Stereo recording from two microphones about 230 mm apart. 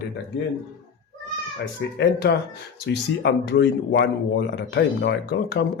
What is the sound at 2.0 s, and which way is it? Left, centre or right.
Speech, left.